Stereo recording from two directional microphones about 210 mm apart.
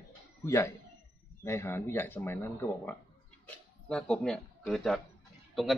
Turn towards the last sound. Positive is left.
turn(degrees=0)  # may be behind; listen again after turning